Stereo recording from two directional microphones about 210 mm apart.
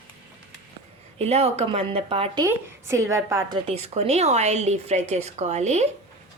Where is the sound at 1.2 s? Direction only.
30° right (ahead or behind).